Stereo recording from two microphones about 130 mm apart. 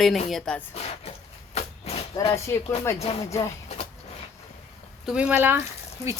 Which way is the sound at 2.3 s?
20° left (ahead or behind).